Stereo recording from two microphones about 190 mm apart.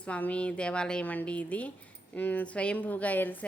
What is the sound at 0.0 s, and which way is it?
A woman's voice, 5° left (ahead or behind).